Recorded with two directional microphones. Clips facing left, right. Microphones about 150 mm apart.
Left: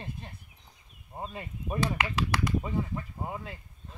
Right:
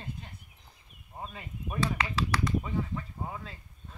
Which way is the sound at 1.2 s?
25° left (ahead or behind).